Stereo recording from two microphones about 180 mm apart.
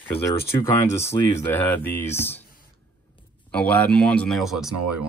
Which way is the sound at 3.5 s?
10° left (ahead or behind).